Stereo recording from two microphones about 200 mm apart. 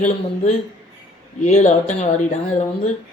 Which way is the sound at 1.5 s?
35° left (ahead or behind).